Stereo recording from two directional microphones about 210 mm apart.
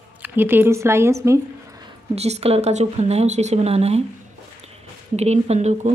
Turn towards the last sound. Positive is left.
turn(degrees=-35)  # may be behind; listen again after turning